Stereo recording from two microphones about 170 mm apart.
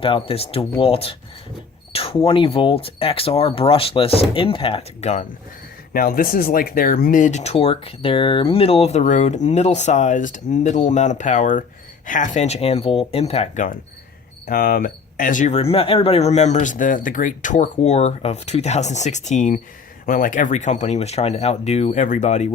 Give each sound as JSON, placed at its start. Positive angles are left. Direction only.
{"t": 0.0, "sound": "speech", "side_deg": 35}
{"t": 5.9, "sound": "speech", "side_deg": 60}
{"t": 14.4, "sound": "speech", "side_deg": 60}